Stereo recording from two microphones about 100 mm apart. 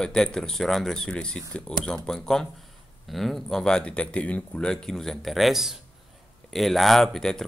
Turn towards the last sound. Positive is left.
turn(degrees=5)  # may be behind; listen again after turning